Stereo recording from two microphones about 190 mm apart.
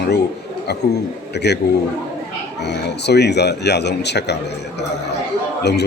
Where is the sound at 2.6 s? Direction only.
65° left (ahead or behind).